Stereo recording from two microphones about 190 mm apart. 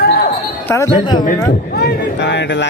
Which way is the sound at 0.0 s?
55° left (ahead or behind).